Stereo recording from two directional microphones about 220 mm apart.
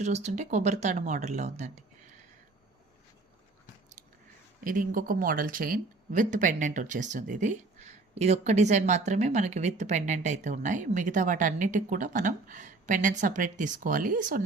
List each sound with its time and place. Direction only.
0.0 s speech: 30° right (ahead or behind)
4.6 s speech: 40° right (ahead or behind)